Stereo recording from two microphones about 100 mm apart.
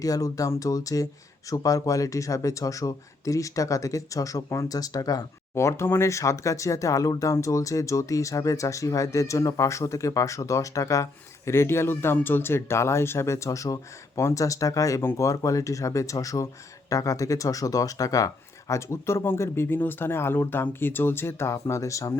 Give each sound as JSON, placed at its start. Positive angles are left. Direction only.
{"t": 0.0, "sound": "speech", "side_deg": 35}
{"t": 5.5, "sound": "speech", "side_deg": 25}